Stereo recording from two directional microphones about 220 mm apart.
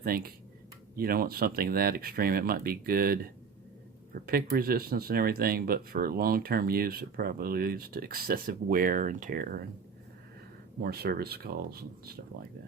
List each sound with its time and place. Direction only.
0.0 s speech: 40° right (ahead or behind)
10.8 s speech: 45° right (ahead or behind)